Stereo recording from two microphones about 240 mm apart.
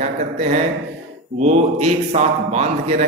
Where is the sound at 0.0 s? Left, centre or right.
Right.